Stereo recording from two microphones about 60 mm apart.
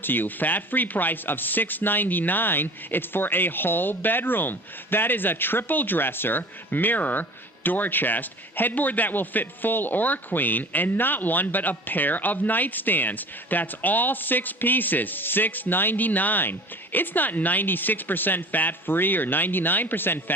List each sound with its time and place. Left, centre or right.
0.0 s speech: left